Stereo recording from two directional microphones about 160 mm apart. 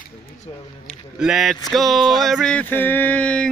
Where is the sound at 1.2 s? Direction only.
Centre (ahead or behind).